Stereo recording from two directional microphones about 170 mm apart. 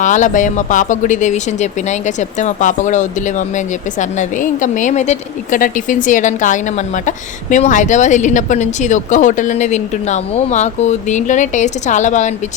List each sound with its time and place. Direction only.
0.0 s speech: 45° left (ahead or behind)